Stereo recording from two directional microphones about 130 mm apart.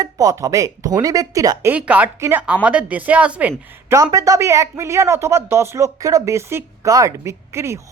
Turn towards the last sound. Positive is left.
turn(degrees=-20)  # may be behind; listen again after turning